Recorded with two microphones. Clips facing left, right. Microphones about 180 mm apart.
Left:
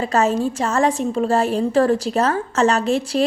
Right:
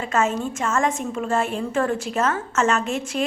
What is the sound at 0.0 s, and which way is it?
A woman's voice, 35° left (ahead or behind).